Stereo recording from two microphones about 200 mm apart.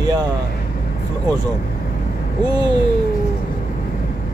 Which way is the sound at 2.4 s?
20° right (ahead or behind).